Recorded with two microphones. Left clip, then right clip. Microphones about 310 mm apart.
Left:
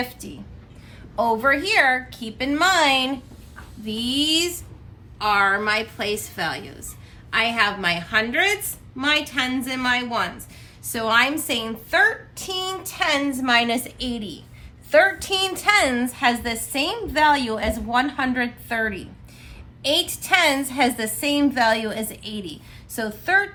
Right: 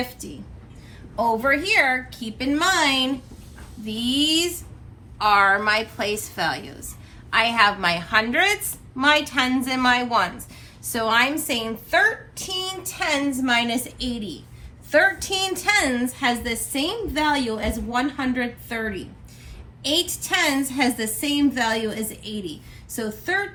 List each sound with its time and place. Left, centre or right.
1.1 s a woman's voice: centre
3.8 s a woman's voice: centre; by 23.5 s left